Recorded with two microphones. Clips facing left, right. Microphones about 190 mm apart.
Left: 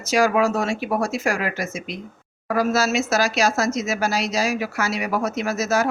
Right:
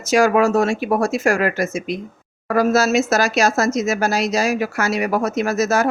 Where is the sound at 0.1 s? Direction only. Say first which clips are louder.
Right 4 dB; 45° right (ahead or behind).